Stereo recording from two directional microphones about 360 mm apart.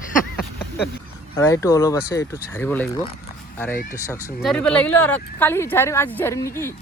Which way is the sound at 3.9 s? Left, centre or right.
Centre.